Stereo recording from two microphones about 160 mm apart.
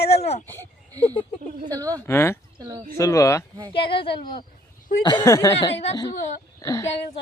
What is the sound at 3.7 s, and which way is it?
Speech, 35° left (ahead or behind).